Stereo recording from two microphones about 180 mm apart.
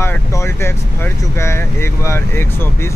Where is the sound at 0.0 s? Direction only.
15° left (ahead or behind).